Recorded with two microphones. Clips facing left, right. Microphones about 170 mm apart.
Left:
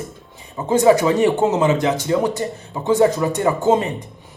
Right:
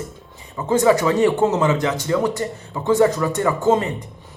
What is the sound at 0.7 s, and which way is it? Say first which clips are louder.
A man's voice: left 2 dB; 20° left (ahead or behind).